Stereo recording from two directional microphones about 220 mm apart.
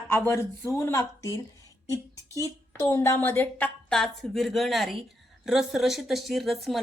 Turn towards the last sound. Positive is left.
turn(degrees=0)  # may be behind; listen again after turning